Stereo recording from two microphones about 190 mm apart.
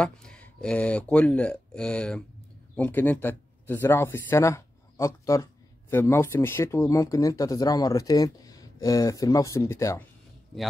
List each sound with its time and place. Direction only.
0.0 s speech: 5° left (ahead or behind)